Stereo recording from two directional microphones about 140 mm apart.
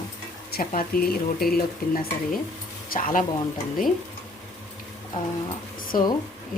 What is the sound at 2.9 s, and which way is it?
Speech, 70° left (ahead or behind).